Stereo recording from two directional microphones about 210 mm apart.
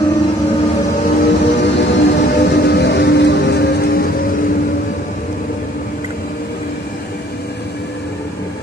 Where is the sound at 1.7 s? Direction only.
50° left (ahead or behind).